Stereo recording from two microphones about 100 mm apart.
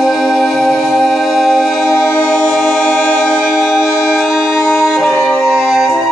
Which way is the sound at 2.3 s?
Centre (ahead or behind).